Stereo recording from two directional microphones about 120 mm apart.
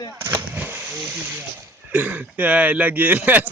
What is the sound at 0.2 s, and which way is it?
Artillery fire, 20° right (ahead or behind).